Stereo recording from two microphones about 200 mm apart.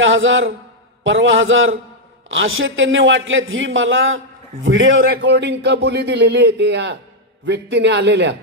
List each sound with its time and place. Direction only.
0.0 s a man's voice: 70° right (ahead or behind)
5.1 s a man's voice: 60° right (ahead or behind)